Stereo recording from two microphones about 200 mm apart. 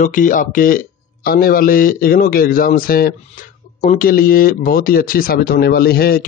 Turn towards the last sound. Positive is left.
turn(degrees=50)  # may be behind; listen again after turning